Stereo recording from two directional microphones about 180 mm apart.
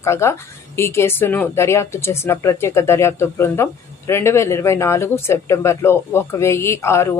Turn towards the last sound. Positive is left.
turn(degrees=15)  # may be behind; listen again after turning